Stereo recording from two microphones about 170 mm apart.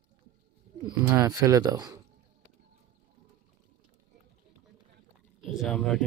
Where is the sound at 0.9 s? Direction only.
20° right (ahead or behind).